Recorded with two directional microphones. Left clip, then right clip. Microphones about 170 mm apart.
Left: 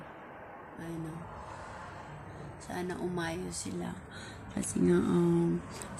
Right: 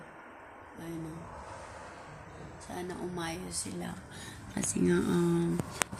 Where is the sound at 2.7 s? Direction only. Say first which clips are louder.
Left 2 dB; 10° left (ahead or behind).